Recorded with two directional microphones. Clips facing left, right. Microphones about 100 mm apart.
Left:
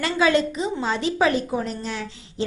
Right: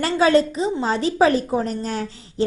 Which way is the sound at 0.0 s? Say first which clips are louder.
Right 3 dB; 40° right (ahead or behind).